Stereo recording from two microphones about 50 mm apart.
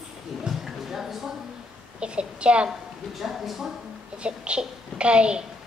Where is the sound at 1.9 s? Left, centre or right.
Right.